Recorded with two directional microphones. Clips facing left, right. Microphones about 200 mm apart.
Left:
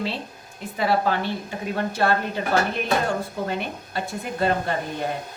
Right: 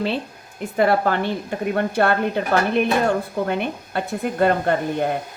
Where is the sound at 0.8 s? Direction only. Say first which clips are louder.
Right 4 dB; 55° right (ahead or behind).